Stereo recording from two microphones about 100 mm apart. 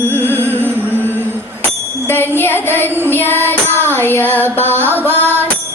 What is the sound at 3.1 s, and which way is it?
Music, 20° left (ahead or behind).